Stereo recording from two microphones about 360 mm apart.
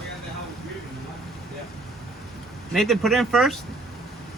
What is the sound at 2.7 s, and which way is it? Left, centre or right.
Speech, centre.